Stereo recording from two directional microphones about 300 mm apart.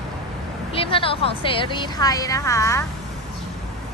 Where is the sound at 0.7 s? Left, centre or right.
Centre.